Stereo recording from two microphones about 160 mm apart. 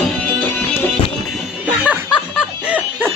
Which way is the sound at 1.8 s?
5° right (ahead or behind).